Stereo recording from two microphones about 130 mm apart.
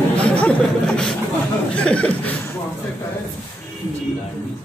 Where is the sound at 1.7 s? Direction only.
10° left (ahead or behind).